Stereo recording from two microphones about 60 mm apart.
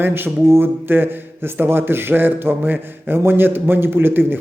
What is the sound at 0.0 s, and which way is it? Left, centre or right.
A man's voice, right.